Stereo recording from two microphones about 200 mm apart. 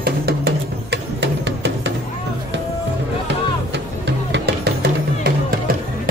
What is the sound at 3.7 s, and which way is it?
Music, 60° right (ahead or behind).